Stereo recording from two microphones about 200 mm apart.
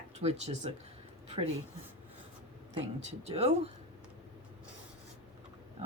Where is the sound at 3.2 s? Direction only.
30° right (ahead or behind).